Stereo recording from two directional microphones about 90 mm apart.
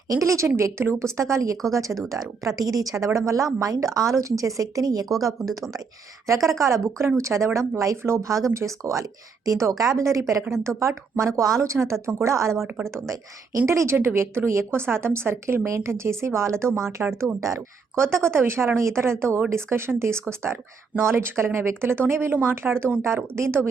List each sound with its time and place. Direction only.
0.1 s speech: 35° right (ahead or behind)
6.6 s a woman's voice: 35° right (ahead or behind)